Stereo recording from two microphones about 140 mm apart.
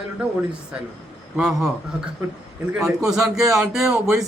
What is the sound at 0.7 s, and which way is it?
Speech, 5° right (ahead or behind).